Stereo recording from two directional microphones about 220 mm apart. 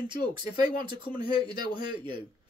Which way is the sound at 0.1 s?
20° right (ahead or behind).